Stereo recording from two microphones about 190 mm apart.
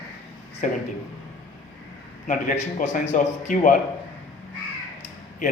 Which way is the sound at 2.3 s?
40° left (ahead or behind).